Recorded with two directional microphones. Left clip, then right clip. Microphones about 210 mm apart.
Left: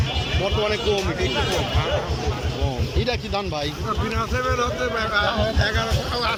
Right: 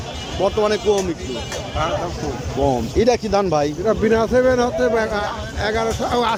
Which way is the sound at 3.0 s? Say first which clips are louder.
Right 9 dB; 55° right (ahead or behind).